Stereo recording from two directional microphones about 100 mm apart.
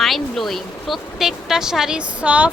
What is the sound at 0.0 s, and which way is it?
Speech, centre (ahead or behind).